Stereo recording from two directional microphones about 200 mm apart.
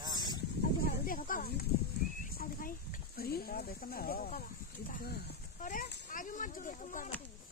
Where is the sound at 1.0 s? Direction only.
45° left (ahead or behind).